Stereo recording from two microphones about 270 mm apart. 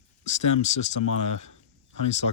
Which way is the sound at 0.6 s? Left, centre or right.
Left.